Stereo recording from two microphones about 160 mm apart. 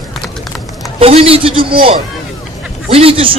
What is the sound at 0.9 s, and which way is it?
Speech, 35° right (ahead or behind).